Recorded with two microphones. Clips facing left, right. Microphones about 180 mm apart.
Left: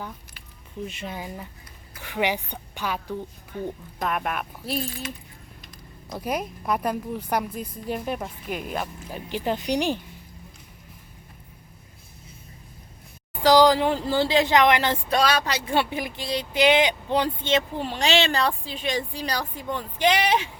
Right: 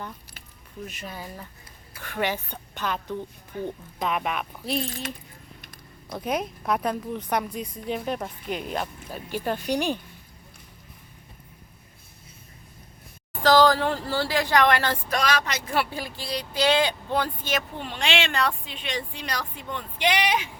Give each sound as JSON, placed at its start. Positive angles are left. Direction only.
{"t": 0.9, "sound": "a woman's voice", "side_deg": 25}
{"t": 6.1, "sound": "a woman's voice", "side_deg": 5}
{"t": 9.1, "sound": "speech", "side_deg": 15}
{"t": 13.4, "sound": "speech", "side_deg": 15}
{"t": 15.1, "sound": "speech", "side_deg": 30}